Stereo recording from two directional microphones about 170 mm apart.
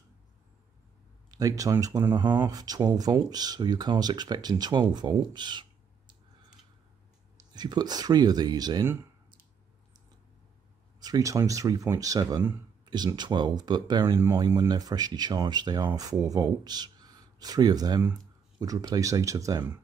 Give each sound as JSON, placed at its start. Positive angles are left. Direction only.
{"t": 1.3, "sound": "speech", "side_deg": -20}
{"t": 7.5, "sound": "speech", "side_deg": -25}
{"t": 11.0, "sound": "speech", "side_deg": -20}